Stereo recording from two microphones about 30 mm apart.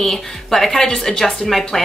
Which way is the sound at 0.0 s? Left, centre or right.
Centre.